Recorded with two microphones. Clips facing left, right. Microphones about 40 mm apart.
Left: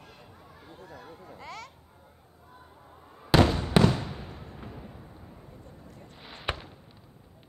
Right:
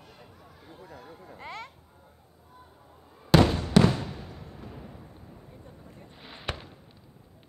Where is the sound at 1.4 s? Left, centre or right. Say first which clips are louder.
Right 3 dB; right.